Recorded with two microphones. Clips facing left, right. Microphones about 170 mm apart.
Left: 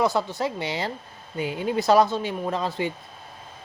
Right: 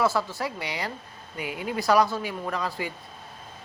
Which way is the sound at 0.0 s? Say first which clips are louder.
Left 2 dB; 20° left (ahead or behind).